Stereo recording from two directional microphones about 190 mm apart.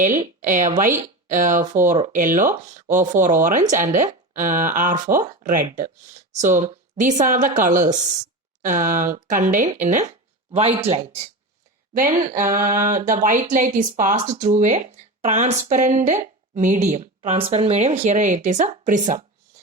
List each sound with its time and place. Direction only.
0.0 s speech: 45° right (ahead or behind)
0.9 s speech: 10° right (ahead or behind)
1.3 s speech: 45° right (ahead or behind)
11.9 s speech: 45° right (ahead or behind)